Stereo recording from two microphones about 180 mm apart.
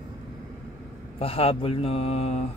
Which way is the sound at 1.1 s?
30° left (ahead or behind).